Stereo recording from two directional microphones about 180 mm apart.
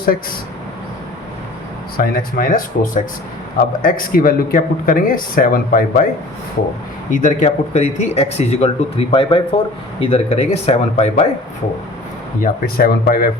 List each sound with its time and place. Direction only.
2.0 s speech: 50° left (ahead or behind)
7.1 s speech: 45° left (ahead or behind)
12.4 s speech: 55° left (ahead or behind)